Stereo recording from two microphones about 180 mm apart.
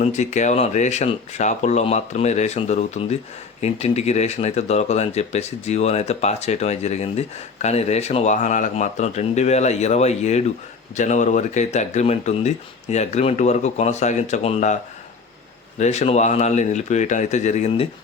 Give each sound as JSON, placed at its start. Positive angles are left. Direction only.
{"t": 0.0, "sound": "speech", "side_deg": 40}
{"t": 15.8, "sound": "speech", "side_deg": 40}